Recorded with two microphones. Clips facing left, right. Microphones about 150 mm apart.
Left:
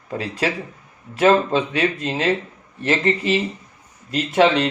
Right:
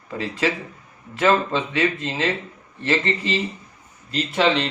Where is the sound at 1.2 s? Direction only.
45° left (ahead or behind).